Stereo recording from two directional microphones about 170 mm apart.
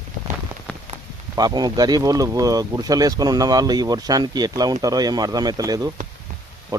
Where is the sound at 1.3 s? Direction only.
25° right (ahead or behind).